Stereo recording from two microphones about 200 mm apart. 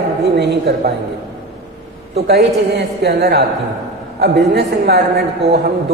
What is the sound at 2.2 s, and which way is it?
A man's voice, 60° right (ahead or behind).